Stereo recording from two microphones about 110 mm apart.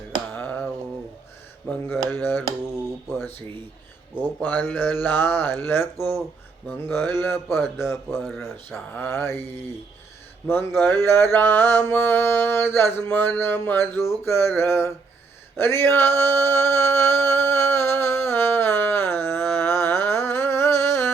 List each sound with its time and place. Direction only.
0.3 s a sound: 15° left (ahead or behind)
1.6 s speech: 15° left (ahead or behind)
4.4 s mantra: 15° left (ahead or behind)
10.4 s mantra: 20° left (ahead or behind)
15.5 s male singing: 20° left (ahead or behind)